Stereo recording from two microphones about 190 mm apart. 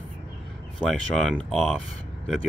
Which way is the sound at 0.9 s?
5° left (ahead or behind).